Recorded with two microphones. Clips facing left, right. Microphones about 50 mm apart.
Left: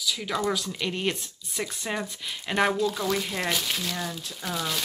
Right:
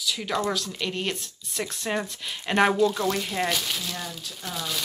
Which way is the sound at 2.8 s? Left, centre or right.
Centre.